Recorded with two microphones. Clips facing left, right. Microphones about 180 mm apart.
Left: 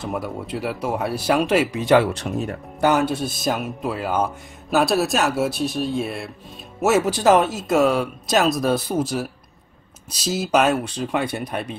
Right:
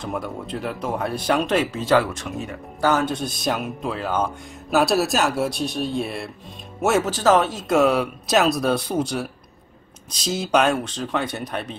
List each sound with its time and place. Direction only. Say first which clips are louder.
0.0 s speech: left 1 dB; 5° left (ahead or behind)
2.3 s speech: left 5 dB; 40° left (ahead or behind)
2.8 s speech: left 2 dB; 10° left (ahead or behind)